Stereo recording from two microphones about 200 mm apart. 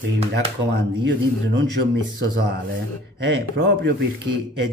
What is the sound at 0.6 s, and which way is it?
Speech, 60° right (ahead or behind).